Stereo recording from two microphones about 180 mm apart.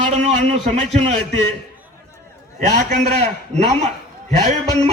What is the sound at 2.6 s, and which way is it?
Speech, 40° right (ahead or behind).